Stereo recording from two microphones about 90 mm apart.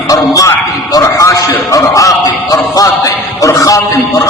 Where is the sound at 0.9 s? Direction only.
35° left (ahead or behind).